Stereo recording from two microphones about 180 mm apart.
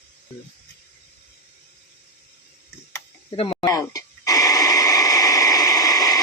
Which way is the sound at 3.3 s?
30° left (ahead or behind).